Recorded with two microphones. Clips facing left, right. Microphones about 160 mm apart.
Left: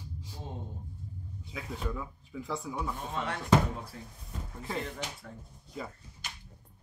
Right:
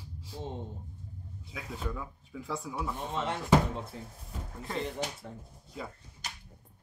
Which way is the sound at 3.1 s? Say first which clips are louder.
Right 1 dB; 25° right (ahead or behind).